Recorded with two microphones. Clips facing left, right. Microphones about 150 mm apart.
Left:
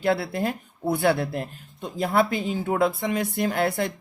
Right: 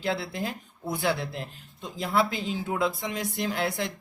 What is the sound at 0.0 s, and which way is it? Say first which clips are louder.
Speech: left 6 dB; 55° left (ahead or behind).